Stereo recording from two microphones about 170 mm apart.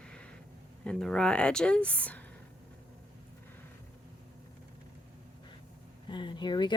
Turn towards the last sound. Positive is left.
turn(degrees=25)  # may be behind; listen again after turning